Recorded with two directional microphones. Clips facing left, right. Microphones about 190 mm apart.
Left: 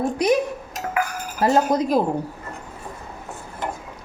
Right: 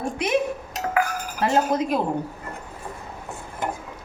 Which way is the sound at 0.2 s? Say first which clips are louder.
Left 6 dB; 40° left (ahead or behind).